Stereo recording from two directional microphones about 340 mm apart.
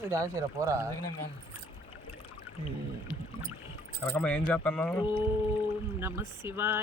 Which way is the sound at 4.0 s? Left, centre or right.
Centre.